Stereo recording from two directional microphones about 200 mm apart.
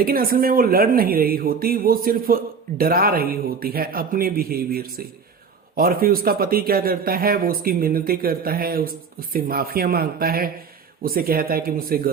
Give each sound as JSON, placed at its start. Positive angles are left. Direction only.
{"t": 0.0, "sound": "speech", "side_deg": -45}